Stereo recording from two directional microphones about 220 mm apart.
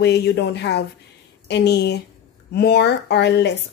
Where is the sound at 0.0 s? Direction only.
50° left (ahead or behind).